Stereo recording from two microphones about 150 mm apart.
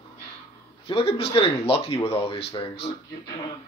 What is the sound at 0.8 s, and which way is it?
Speech, 40° left (ahead or behind).